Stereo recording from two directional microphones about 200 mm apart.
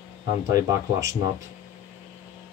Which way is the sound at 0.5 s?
15° right (ahead or behind).